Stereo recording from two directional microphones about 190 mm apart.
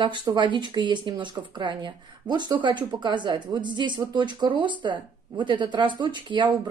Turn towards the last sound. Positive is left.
turn(degrees=-25)  # may be behind; listen again after turning